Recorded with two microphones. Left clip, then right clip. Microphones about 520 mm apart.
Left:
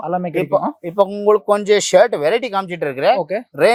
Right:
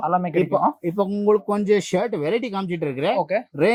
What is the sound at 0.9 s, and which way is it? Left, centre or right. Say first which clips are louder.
Speech: left 5 dB; left.